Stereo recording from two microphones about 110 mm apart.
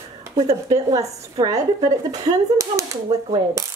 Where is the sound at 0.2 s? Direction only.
30° right (ahead or behind).